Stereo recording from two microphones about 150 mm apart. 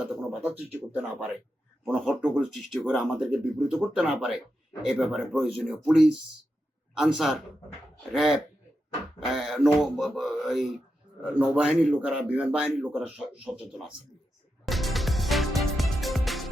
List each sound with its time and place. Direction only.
0.0 s speech: 10° right (ahead or behind)
14.6 s music: centre (ahead or behind)